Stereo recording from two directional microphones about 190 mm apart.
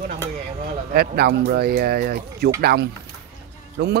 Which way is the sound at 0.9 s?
55° right (ahead or behind).